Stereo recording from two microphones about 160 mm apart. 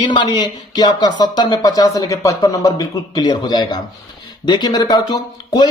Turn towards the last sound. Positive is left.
turn(degrees=25)  # may be behind; listen again after turning